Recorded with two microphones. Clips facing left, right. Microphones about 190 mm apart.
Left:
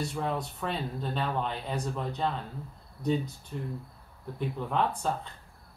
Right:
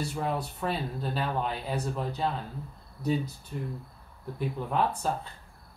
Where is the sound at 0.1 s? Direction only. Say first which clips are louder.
Right 1 dB; 5° right (ahead or behind).